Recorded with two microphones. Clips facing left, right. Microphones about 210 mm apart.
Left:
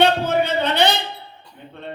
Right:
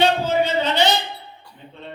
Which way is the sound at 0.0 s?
60° left (ahead or behind).